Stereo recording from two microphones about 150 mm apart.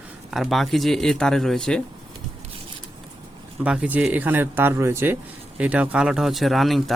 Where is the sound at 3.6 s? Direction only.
10° right (ahead or behind).